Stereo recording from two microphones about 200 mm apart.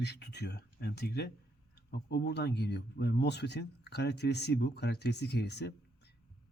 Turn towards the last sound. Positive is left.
turn(degrees=55)  # may be behind; listen again after turning